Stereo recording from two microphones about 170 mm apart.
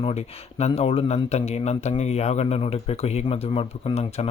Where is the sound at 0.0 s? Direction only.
40° left (ahead or behind).